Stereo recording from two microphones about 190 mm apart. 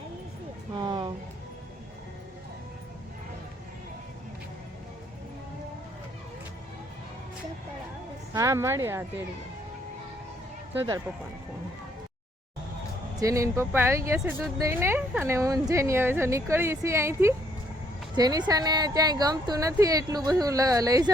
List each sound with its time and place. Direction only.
0.8 s a sound: 20° right (ahead or behind)
8.3 s a woman's voice: 15° right (ahead or behind)
10.8 s speech: 20° right (ahead or behind)
13.1 s a woman's voice: 15° right (ahead or behind)